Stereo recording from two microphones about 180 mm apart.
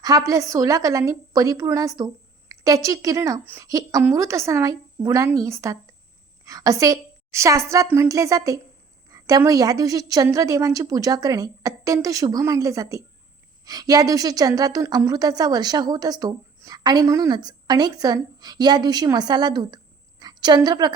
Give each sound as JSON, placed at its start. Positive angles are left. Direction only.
{"t": 0.0, "sound": "a woman's voice", "side_deg": -20}